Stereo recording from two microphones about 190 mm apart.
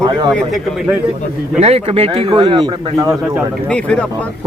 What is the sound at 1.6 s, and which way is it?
A man's voice, 30° right (ahead or behind).